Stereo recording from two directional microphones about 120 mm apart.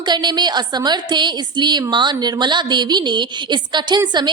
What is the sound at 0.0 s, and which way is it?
A woman's voice, 40° right (ahead or behind).